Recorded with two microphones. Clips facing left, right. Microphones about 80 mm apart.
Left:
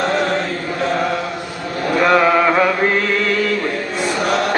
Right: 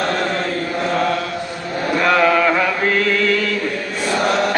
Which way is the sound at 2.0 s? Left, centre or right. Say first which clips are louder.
Left 1 dB; left.